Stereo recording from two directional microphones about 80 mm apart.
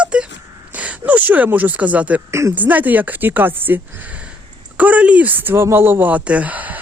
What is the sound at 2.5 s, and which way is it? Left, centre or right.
Speech, right.